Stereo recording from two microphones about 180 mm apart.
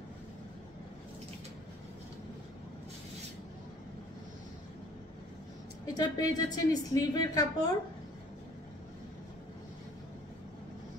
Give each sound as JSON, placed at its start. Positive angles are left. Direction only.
{"t": 5.9, "sound": "a woman's voice", "side_deg": 20}